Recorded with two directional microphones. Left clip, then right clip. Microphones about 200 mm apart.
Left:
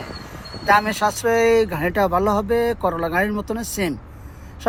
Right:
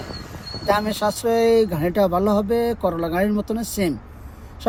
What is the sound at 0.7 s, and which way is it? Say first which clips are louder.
Speech: left 4 dB; 10° right (ahead or behind).